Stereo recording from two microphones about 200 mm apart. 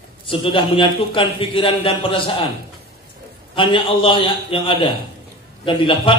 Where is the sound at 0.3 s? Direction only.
25° left (ahead or behind).